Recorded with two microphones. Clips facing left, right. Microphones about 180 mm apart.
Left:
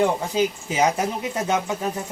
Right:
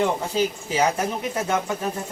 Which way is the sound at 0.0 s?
15° left (ahead or behind).